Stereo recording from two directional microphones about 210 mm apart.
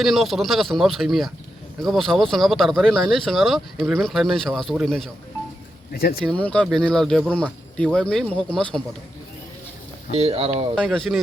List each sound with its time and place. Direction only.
0.0 s speech: centre (ahead or behind)
5.9 s speech: 45° left (ahead or behind)
6.2 s speech: 5° left (ahead or behind)
10.1 s speech: 30° right (ahead or behind)
10.8 s speech: centre (ahead or behind)